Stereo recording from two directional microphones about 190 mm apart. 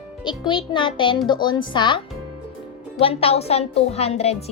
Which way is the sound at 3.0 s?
30° left (ahead or behind).